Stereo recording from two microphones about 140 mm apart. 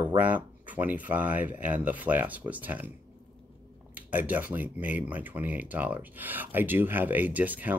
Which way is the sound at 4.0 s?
10° right (ahead or behind).